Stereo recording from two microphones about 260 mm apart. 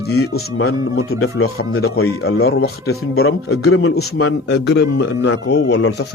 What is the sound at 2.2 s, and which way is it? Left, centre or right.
Speech, left.